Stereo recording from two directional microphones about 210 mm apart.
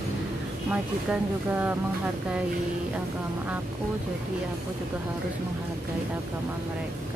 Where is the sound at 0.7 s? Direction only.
5° right (ahead or behind).